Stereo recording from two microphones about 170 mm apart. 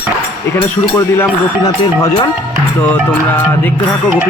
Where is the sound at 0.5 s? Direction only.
15° left (ahead or behind).